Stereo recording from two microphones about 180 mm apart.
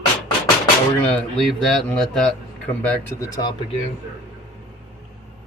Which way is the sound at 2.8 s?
15° left (ahead or behind).